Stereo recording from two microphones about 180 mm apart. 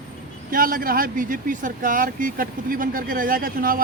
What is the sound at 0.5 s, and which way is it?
Speech, 55° right (ahead or behind).